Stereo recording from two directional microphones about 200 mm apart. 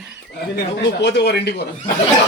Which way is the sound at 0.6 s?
60° left (ahead or behind).